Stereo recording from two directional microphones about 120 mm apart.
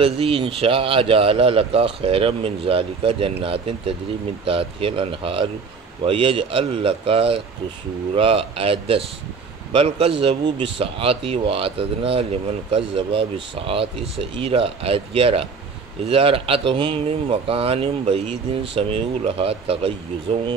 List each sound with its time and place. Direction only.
0.0 s speech: 50° right (ahead or behind)